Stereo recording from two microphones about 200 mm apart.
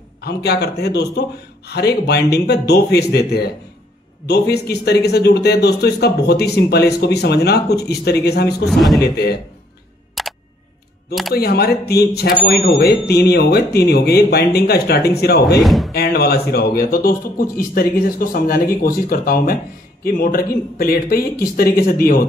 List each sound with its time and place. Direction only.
0.2 s a man's voice: 55° left (ahead or behind)
8.6 s a man's voice: centre (ahead or behind)
9.0 s speech: 50° left (ahead or behind)
10.2 s single-lens reflex camera: centre (ahead or behind)
11.3 s speech: 50° left (ahead or behind)
15.6 s speech: centre (ahead or behind)
15.9 s speech: 50° left (ahead or behind)